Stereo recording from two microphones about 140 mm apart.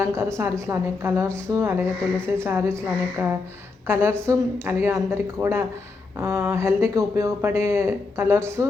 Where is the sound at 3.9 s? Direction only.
15° right (ahead or behind).